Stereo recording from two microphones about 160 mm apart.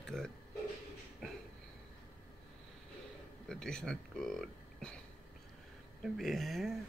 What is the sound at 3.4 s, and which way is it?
Speech, 5° left (ahead or behind).